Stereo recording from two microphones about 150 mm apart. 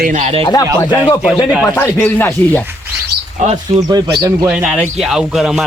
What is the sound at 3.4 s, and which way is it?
Speech, 50° right (ahead or behind).